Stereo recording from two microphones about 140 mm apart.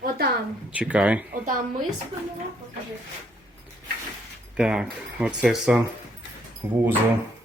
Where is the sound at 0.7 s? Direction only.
10° right (ahead or behind).